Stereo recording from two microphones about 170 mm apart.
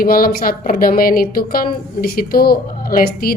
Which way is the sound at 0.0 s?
60° left (ahead or behind).